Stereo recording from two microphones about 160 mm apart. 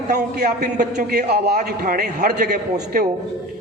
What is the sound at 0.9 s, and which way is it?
A man's voice, 85° right.